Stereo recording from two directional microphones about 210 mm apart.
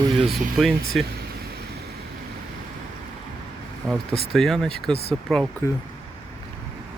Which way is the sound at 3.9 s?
Centre (ahead or behind).